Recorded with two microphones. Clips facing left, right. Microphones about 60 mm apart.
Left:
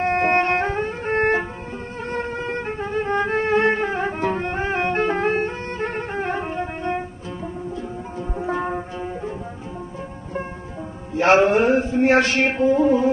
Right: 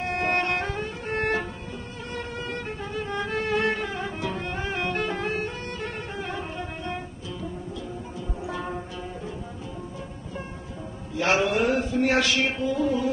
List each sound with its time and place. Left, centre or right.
0.0 s music: left
11.1 s mantra: left